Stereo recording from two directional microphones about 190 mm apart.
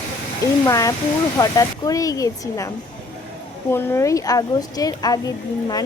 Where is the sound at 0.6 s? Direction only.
15° left (ahead or behind).